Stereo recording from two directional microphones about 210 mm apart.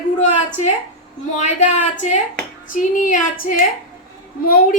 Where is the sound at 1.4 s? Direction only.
35° left (ahead or behind).